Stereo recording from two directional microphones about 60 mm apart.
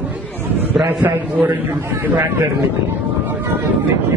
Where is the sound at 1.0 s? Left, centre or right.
Right.